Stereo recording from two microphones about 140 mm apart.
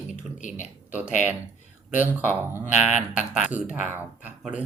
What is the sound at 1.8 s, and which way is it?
Speech, 10° right (ahead or behind).